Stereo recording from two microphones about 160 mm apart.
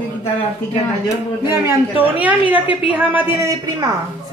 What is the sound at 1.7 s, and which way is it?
A woman's voice, 10° right (ahead or behind).